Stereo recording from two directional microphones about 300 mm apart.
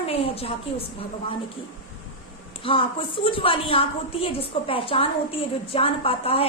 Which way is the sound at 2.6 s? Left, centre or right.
Centre.